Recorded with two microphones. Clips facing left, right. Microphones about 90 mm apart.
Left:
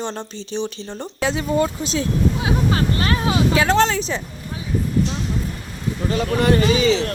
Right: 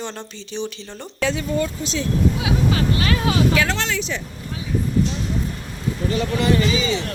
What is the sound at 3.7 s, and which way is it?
Speech, 40° left (ahead or behind).